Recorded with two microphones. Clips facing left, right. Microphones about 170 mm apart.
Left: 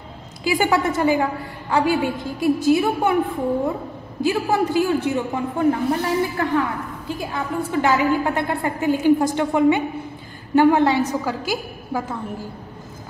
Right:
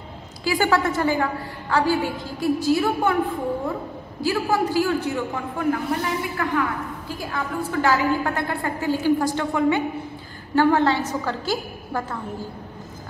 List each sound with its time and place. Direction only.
0.4 s a woman's voice: 20° left (ahead or behind)
4.2 s a woman's voice: 20° left (ahead or behind)
11.2 s a woman's voice: 10° left (ahead or behind)